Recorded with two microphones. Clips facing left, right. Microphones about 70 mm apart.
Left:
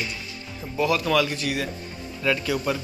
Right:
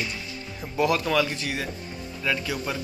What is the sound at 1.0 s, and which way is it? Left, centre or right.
Speech, right.